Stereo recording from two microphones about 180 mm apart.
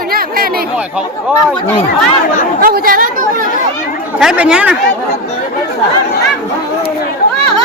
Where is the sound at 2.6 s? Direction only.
55° right (ahead or behind).